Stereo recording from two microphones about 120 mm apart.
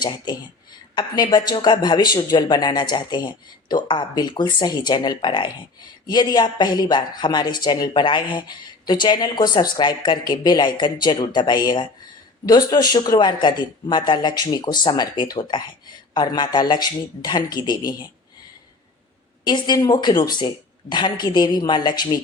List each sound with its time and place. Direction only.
0.9 s speech: 35° left (ahead or behind)
19.5 s speech: 35° left (ahead or behind)